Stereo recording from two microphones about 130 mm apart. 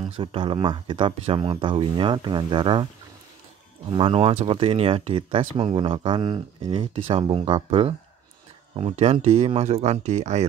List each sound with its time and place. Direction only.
0.2 s speech: 40° right (ahead or behind)
3.9 s speech: 45° right (ahead or behind)
6.8 s speech: 50° right (ahead or behind)
8.7 s speech: 55° right (ahead or behind)